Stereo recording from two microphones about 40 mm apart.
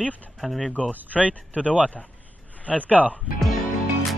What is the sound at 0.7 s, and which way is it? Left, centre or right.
Speech, left.